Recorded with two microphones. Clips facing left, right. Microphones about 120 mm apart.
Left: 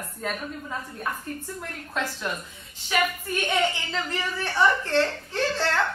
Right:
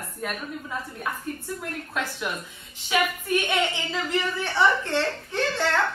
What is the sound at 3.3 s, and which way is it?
A woman's voice, 15° right (ahead or behind).